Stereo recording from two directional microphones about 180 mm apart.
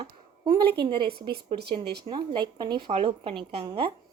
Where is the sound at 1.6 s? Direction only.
65° right (ahead or behind).